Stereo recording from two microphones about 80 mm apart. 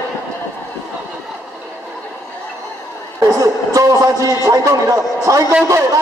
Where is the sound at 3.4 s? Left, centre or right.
Right.